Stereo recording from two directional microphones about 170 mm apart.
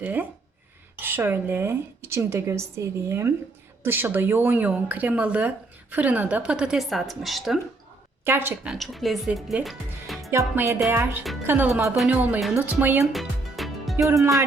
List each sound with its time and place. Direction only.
0.0 s speech: 10° right (ahead or behind)
8.2 s speech: 15° right (ahead or behind)
10.3 s speech: 15° right (ahead or behind)
13.1 s music: centre (ahead or behind)
14.1 s speech: 20° right (ahead or behind)